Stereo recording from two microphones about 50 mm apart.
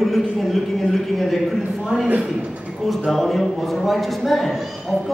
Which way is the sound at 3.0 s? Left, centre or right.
Centre.